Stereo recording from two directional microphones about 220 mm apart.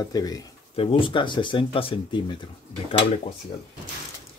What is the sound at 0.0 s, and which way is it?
Speech, 15° left (ahead or behind).